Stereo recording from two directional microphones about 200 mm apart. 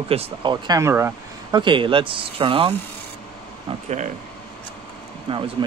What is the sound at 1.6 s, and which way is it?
Speech, 25° right (ahead or behind).